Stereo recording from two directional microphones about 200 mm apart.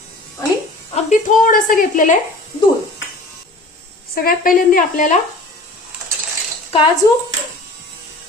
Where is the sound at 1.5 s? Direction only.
45° left (ahead or behind).